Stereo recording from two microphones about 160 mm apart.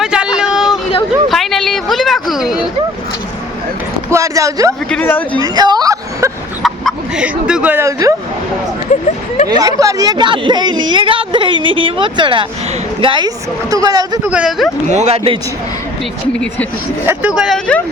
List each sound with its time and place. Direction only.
0.0 s a sound: 5° right (ahead or behind)
4.1 s a sound: 20° right (ahead or behind)
4.9 s speech: 10° left (ahead or behind)
5.4 s a sound: 25° right (ahead or behind)
6.6 s speech: centre (ahead or behind); by 8.1 s 20° right (ahead or behind)
9.5 s a woman's voice: 20° right (ahead or behind)
14.3 s speech: 5° right (ahead or behind)
14.8 s speech: 45° right (ahead or behind)
17.1 s speech: 5° right (ahead or behind)